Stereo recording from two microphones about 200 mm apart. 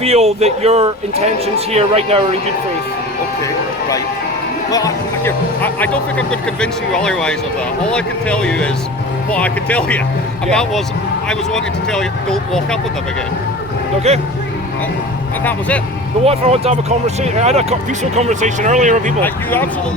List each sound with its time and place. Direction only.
0.0 s speech: 30° right (ahead or behind)
3.4 s speech: 15° left (ahead or behind)
14.1 s speech: 30° right (ahead or behind)
16.2 s speech: 30° right (ahead or behind)
19.2 s speech: 10° left (ahead or behind)